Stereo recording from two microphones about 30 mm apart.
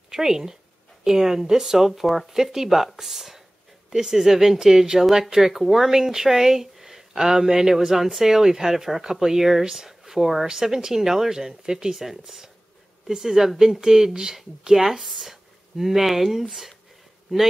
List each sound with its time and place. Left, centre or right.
0.1 s speech: centre
1.9 s speech: centre
10.4 s speech: centre
12.0 s speech: centre